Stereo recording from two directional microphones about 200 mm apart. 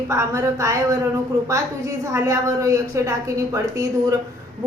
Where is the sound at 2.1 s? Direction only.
15° right (ahead or behind).